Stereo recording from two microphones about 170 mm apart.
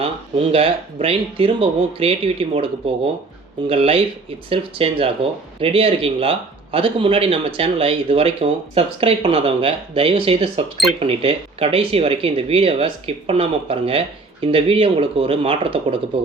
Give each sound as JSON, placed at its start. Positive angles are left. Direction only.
{"t": 0.0, "sound": "speech", "side_deg": -35}